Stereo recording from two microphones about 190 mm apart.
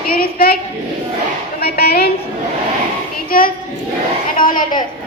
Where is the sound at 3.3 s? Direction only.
50° left (ahead or behind).